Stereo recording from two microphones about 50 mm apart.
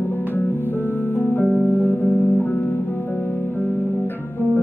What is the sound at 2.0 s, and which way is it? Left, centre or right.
Music, left.